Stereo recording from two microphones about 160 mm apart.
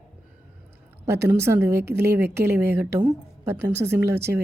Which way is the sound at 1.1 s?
15° right (ahead or behind).